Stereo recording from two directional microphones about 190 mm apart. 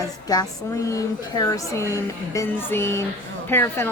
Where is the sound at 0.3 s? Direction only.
20° left (ahead or behind).